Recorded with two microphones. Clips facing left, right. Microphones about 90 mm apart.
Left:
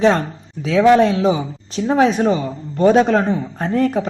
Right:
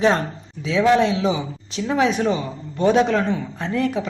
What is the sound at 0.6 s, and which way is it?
A woman's voice, 45° left (ahead or behind).